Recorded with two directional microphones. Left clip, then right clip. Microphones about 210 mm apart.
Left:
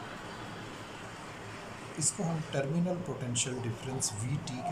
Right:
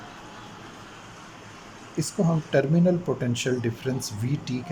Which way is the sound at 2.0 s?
40° right (ahead or behind).